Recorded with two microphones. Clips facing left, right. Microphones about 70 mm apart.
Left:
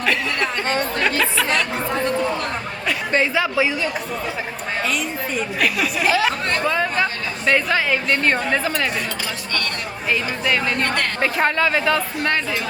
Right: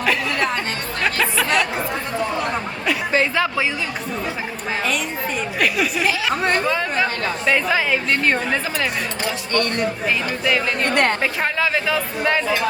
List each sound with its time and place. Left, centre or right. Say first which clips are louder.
0.0 s chatter: right 1 dB; centre
1.0 s speech: right 3 dB; centre
2.8 s a sound: even; centre
5.5 s a woman's voice: right 2 dB; centre
10.4 s a woman's voice: right 1 dB; centre